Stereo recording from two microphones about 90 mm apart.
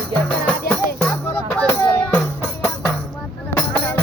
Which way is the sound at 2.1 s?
20° left (ahead or behind).